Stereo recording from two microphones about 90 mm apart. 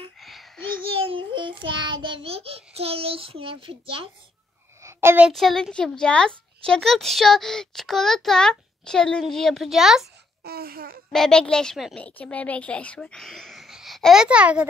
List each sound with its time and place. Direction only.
0.2 s a sound: centre (ahead or behind)
0.9 s child singing: 80° right
4.8 s a sound: 30° right (ahead or behind)
5.3 s a child's voice: 5° left (ahead or behind)
11.1 s a child's voice: 5° left (ahead or behind)
14.2 s a child's voice: 10° right (ahead or behind)